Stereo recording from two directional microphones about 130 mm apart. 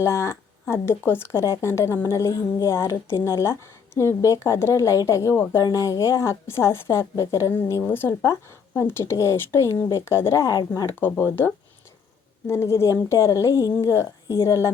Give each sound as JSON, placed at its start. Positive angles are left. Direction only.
{"t": 0.0, "sound": "a woman's voice", "side_deg": 25}
{"t": 12.5, "sound": "a woman's voice", "side_deg": 20}